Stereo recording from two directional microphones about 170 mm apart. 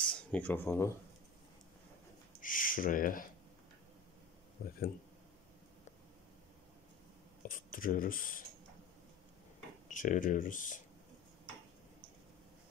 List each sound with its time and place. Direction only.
0.1 s speech: 10° left (ahead or behind)
2.4 s speech: 55° left (ahead or behind)
4.6 s speech: 65° left (ahead or behind)
7.4 s speech: 55° left (ahead or behind)
9.8 s speech: 50° left (ahead or behind)